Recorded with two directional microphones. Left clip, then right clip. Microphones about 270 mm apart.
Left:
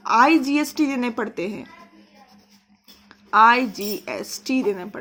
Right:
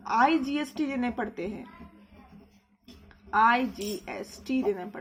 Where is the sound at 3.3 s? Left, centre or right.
Left.